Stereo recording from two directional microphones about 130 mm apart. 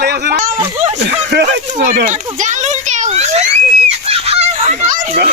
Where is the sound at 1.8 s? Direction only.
70° right (ahead or behind).